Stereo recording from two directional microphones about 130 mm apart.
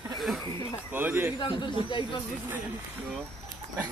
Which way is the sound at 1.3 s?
35° left (ahead or behind).